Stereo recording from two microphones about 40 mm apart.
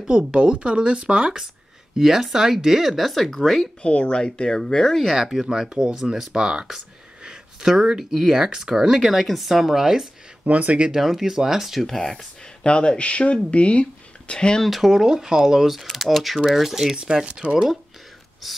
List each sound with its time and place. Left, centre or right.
0.3 s speech: right; by 3.6 s centre
3.8 s speech: left
5.1 s speech: centre
5.8 s speech: centre
7.2 s a sound: right
8.0 s speech: centre
8.3 s speech: centre
10.4 s speech: right
10.9 s speech: centre
12.6 s speech: left
14.7 s speech: centre
16.9 s speech: centre